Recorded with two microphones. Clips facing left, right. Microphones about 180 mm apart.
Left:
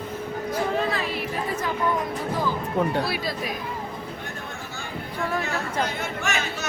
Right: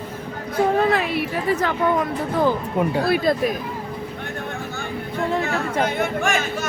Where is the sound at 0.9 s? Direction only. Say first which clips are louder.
Right 6 dB; 65° right (ahead or behind).